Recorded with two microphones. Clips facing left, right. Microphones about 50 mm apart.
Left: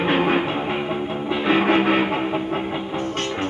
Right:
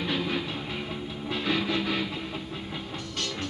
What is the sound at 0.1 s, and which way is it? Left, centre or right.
Music, left.